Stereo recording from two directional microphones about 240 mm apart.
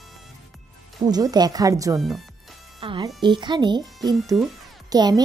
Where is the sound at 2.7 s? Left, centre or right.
Right.